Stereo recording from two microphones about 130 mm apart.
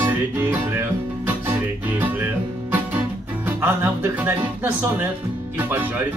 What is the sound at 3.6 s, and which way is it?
Music, 15° right (ahead or behind).